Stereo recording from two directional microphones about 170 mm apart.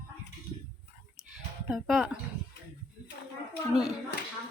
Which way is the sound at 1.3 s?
Centre (ahead or behind).